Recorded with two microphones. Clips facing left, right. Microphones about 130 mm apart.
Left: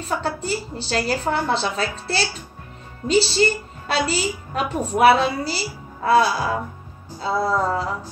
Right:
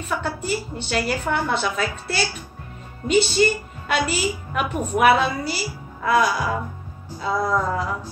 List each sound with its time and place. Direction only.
0.0 s a woman's voice: 30° left (ahead or behind)